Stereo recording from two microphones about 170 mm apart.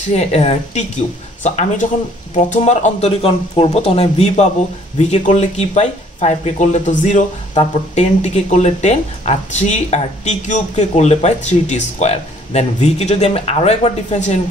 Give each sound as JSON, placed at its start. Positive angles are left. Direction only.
{"t": 0.1, "sound": "speech", "side_deg": 40}